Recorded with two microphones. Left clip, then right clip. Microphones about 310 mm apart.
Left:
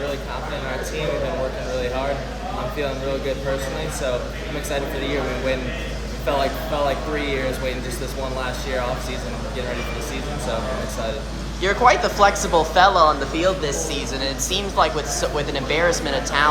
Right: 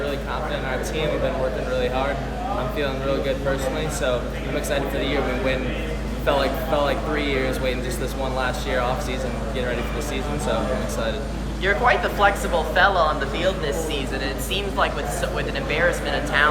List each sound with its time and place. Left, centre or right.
2.7 s speech: centre
4.7 s speech: centre
11.6 s speech: centre
14.5 s speech: centre